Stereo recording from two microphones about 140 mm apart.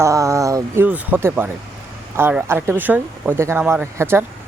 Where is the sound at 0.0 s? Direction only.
20° right (ahead or behind).